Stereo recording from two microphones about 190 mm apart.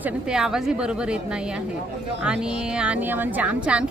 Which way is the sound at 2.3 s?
5° right (ahead or behind).